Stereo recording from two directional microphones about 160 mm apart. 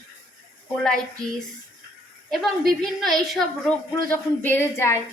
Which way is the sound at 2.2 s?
Centre (ahead or behind).